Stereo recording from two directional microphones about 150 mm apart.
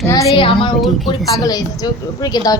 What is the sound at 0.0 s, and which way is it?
Speech, 20° left (ahead or behind).